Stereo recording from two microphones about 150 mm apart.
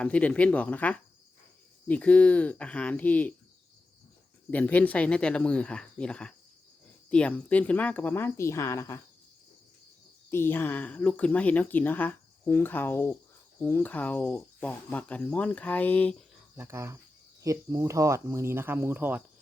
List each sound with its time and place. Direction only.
0.0 s speech: 10° left (ahead or behind)
4.5 s speech: 10° left (ahead or behind)
10.2 s speech: 15° left (ahead or behind)
16.6 s speech: 20° right (ahead or behind)